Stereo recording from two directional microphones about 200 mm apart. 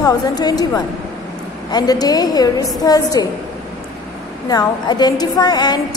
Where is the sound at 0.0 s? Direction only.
20° left (ahead or behind).